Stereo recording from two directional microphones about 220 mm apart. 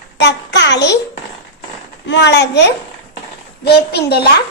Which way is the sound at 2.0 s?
50° left (ahead or behind).